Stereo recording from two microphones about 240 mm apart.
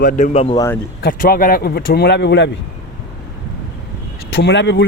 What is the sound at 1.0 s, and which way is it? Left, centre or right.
Speech, left.